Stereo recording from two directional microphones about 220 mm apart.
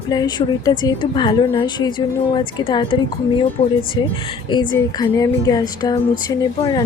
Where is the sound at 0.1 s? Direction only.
20° left (ahead or behind).